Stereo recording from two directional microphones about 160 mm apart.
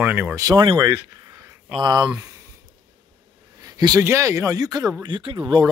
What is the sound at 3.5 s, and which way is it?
Speech, 25° right (ahead or behind).